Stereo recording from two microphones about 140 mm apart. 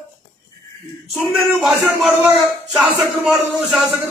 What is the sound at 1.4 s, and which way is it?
Speech, centre (ahead or behind).